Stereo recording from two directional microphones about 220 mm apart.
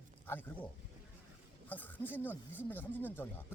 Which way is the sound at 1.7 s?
10° left (ahead or behind).